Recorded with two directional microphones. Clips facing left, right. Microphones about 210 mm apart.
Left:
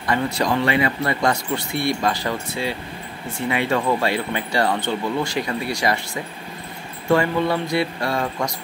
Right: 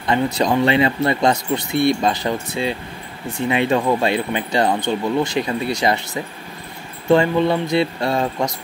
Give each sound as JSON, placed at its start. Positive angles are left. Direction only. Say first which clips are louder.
{"t": 0.0, "sound": "speech", "louder": "right 3 dB", "side_deg": -20}
{"t": 7.1, "sound": "speech", "louder": "right 4 dB", "side_deg": -20}